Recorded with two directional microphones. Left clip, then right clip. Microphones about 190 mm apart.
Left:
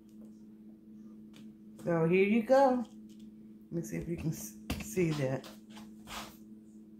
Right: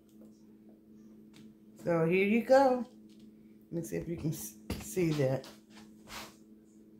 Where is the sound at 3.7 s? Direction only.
25° right (ahead or behind).